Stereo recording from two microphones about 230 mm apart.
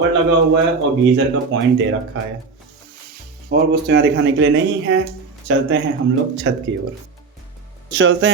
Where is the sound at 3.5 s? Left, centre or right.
Right.